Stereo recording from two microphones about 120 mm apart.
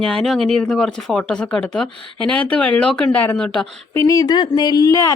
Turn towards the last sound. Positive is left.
turn(degrees=25)  # may be behind; listen again after turning